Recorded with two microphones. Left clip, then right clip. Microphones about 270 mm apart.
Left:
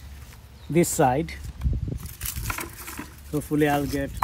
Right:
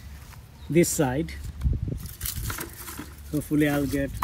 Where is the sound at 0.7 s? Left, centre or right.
Left.